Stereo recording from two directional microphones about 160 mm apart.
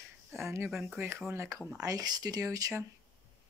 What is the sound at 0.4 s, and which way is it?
Speech, 15° right (ahead or behind).